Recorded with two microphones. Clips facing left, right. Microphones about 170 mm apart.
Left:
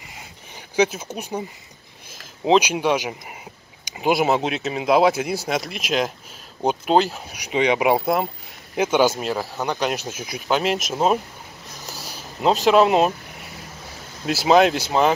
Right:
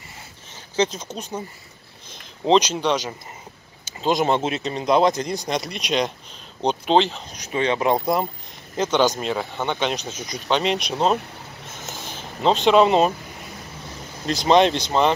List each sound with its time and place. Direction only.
0.7 s speech: 10° left (ahead or behind)
2.4 s speech: 5° left (ahead or behind)
11.6 s a sound: 35° left (ahead or behind)
12.4 s speech: 5° left (ahead or behind)
14.2 s speech: 5° left (ahead or behind)